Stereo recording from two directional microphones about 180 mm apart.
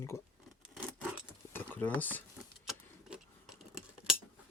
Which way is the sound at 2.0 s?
10° left (ahead or behind).